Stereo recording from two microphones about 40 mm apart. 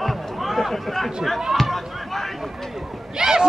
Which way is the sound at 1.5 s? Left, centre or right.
Centre.